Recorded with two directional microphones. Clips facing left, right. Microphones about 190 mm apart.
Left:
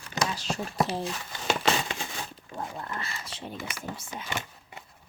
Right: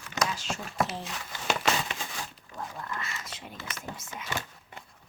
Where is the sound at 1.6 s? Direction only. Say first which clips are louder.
Left 2 dB; 30° left (ahead or behind).